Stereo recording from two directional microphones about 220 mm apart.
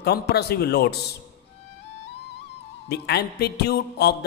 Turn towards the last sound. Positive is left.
turn(degrees=45)  # may be behind; listen again after turning